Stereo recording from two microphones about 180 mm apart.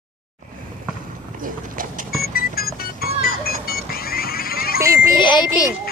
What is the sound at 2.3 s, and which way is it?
Music, 55° left (ahead or behind).